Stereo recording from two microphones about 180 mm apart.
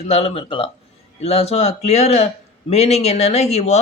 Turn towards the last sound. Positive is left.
turn(degrees=35)  # may be behind; listen again after turning